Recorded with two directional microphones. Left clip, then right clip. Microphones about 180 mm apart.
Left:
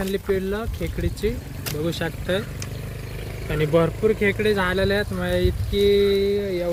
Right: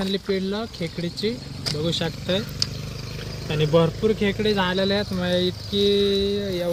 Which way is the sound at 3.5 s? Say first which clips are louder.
Even; 5° right (ahead or behind).